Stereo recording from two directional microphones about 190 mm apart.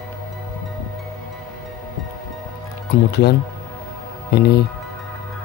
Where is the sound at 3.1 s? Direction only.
60° left (ahead or behind).